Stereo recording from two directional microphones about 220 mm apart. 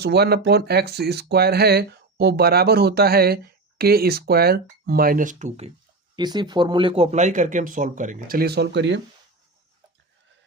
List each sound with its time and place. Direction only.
0.0 s speech: 45° right (ahead or behind); by 5.7 s 30° right (ahead or behind)
6.1 s speech: 20° right (ahead or behind); by 9.0 s 50° right (ahead or behind)